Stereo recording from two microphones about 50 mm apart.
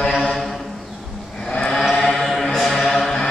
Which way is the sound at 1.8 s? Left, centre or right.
Centre.